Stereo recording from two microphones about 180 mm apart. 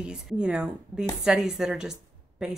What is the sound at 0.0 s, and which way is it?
A woman's voice, 5° right (ahead or behind).